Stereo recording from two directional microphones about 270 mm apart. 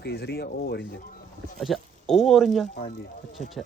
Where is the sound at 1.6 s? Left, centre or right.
Centre.